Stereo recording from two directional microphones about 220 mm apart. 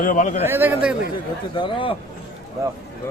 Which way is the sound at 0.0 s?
35° left (ahead or behind).